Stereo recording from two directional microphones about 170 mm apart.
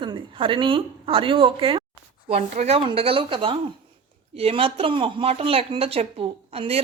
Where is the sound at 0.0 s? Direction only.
30° right (ahead or behind).